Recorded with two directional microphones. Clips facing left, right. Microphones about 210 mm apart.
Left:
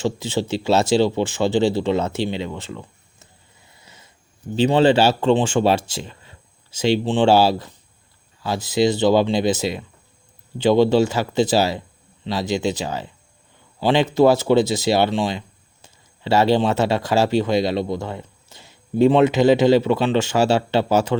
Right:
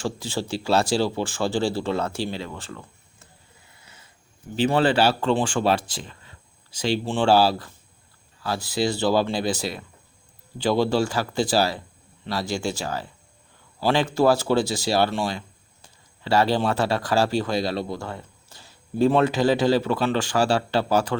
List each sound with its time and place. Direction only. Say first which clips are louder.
0.0 s speech: left 5 dB; 20° left (ahead or behind)
4.5 s speech: left 5 dB; 20° left (ahead or behind)